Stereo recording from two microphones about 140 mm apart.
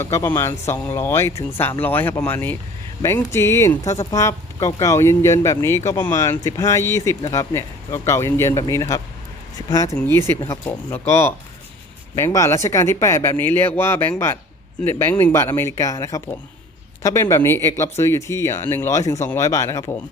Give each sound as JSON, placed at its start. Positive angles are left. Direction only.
{"t": 0.0, "sound": "speech", "side_deg": 20}